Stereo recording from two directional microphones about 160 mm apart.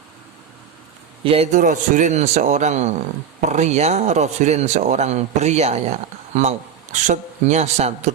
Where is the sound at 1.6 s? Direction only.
55° right (ahead or behind).